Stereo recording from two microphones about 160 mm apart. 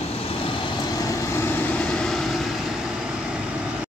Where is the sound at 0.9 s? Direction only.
20° left (ahead or behind); by 2.4 s 5° left (ahead or behind).